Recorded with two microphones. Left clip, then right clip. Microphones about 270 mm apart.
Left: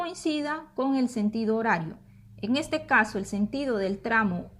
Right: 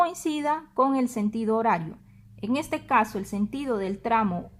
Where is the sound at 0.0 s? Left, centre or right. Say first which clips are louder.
Right 5 dB; centre.